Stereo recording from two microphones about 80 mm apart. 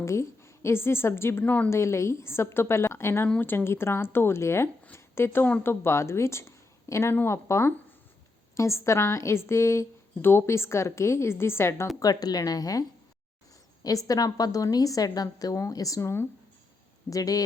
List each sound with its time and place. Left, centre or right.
0.0 s a woman's voice: left
1.7 s a woman's voice: left
11.9 s a woman's voice: left
13.8 s a woman's voice: left
17.1 s a woman's voice: left